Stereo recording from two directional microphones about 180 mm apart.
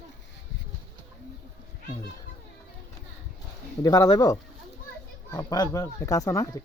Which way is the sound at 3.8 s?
20° left (ahead or behind).